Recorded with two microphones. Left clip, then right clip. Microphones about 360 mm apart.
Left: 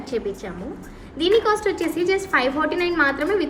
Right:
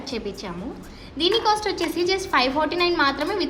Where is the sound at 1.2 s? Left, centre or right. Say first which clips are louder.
Left 2 dB; centre.